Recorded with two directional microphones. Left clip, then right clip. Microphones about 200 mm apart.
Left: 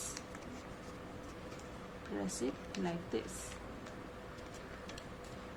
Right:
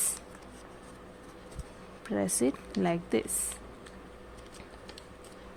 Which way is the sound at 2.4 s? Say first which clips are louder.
Right 10 dB; 50° right (ahead or behind).